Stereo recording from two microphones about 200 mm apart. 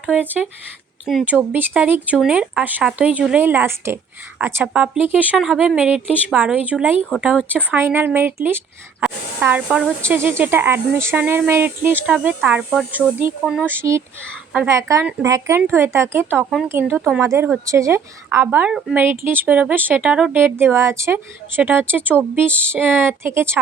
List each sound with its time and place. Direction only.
0.0 s speech: 5° right (ahead or behind)
17.0 s speech: centre (ahead or behind)
17.2 s speech: 15° right (ahead or behind)